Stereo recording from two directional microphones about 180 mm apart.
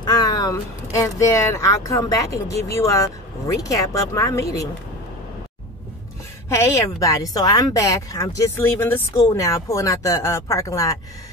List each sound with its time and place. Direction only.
0.0 s a woman's voice: 20° left (ahead or behind)
6.5 s a woman's voice: 15° left (ahead or behind)